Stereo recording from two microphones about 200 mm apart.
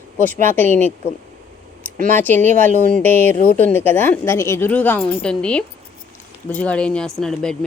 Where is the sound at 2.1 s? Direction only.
10° left (ahead or behind).